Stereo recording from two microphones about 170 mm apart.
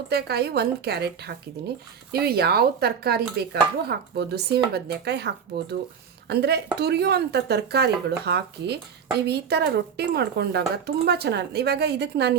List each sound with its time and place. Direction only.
0.1 s a woman's voice: 70° right (ahead or behind)